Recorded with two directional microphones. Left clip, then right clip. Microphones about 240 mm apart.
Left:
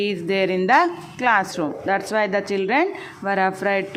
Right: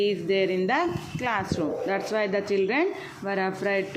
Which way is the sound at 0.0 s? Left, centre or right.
Centre.